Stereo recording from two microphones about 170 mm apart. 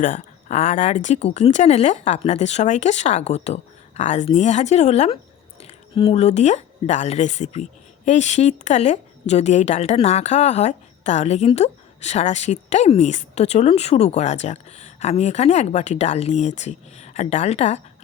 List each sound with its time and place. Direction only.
0.0 s speech: 50° left (ahead or behind)